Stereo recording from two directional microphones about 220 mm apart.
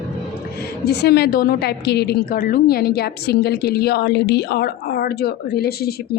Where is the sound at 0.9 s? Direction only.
45° left (ahead or behind).